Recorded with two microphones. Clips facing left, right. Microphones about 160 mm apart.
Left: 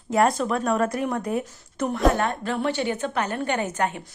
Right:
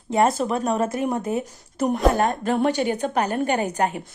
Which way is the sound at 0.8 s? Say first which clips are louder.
Right 1 dB; 25° right (ahead or behind).